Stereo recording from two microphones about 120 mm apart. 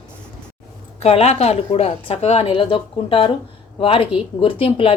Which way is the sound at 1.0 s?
60° left (ahead or behind).